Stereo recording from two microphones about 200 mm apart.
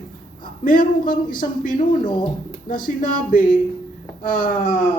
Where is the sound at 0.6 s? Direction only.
45° left (ahead or behind).